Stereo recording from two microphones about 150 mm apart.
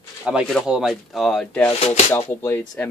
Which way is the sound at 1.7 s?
40° left (ahead or behind).